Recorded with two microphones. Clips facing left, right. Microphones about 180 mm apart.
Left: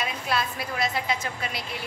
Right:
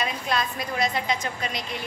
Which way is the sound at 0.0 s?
5° left (ahead or behind).